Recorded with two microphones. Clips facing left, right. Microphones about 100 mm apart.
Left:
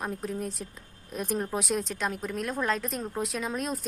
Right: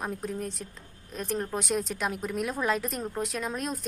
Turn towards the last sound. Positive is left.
turn(degrees=0)  # may be behind; listen again after turning